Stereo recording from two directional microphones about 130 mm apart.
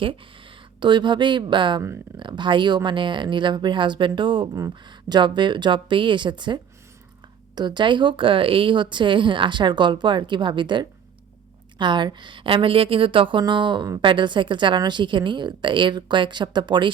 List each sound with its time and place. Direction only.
0.8 s a woman's voice: 35° right (ahead or behind)